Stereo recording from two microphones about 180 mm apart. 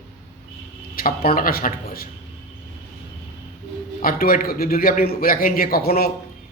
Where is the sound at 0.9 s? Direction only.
55° left (ahead or behind).